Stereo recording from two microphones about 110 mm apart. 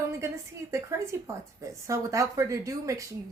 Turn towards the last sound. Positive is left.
turn(degrees=-30)  # may be behind; listen again after turning